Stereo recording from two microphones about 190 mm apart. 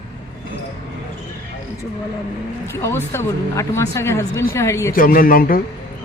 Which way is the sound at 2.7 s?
15° left (ahead or behind).